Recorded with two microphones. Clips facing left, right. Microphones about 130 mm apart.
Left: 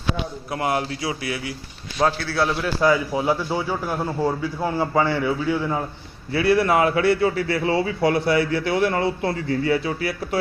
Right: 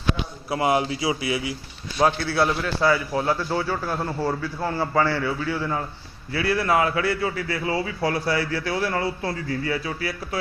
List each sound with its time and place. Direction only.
0.5 s a man's voice: 5° right (ahead or behind)
2.5 s a man's voice: centre (ahead or behind)
2.8 s a man's voice: 10° left (ahead or behind)